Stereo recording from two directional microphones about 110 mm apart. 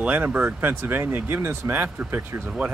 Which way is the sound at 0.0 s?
15° right (ahead or behind).